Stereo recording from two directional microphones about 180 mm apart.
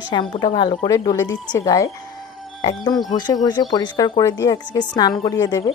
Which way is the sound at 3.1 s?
25° left (ahead or behind).